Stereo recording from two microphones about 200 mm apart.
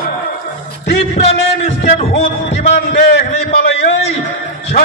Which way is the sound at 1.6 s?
30° left (ahead or behind).